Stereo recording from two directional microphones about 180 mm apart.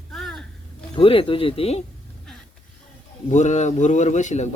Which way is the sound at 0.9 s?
30° left (ahead or behind).